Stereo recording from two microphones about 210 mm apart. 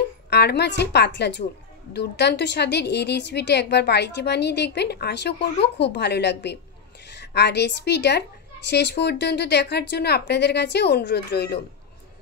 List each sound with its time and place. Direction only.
0.3 s a woman's voice: 55° left (ahead or behind)